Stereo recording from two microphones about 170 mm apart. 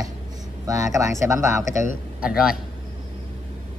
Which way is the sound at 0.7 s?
20° right (ahead or behind).